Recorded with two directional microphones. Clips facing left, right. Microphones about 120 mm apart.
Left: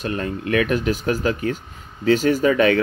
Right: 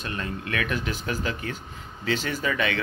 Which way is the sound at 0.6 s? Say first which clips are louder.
Left 9 dB; 45° left (ahead or behind).